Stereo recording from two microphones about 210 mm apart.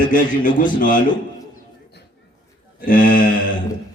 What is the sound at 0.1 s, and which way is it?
Speech, 40° left (ahead or behind).